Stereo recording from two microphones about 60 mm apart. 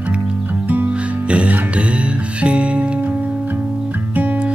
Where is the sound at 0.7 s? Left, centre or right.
Right.